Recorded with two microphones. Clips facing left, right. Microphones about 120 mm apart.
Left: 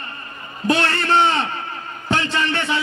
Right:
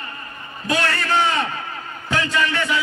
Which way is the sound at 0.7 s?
30° left (ahead or behind).